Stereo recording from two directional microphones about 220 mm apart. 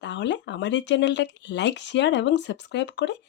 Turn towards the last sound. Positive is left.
turn(degrees=50)  # may be behind; listen again after turning